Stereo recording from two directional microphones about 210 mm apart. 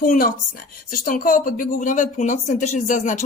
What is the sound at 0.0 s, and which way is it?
A woman's voice, 40° left (ahead or behind).